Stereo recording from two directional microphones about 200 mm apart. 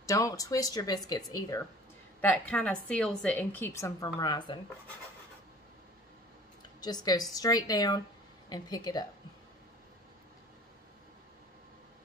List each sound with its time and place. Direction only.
0.0 s a woman's voice: 15° left (ahead or behind)
2.2 s a woman's voice: 5° left (ahead or behind); by 4.6 s 20° left (ahead or behind)
6.8 s a woman's voice: 20° left (ahead or behind)